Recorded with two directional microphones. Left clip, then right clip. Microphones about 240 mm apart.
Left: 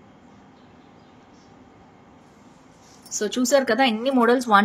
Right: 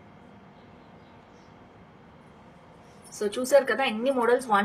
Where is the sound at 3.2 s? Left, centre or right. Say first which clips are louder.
Left 1 dB; left.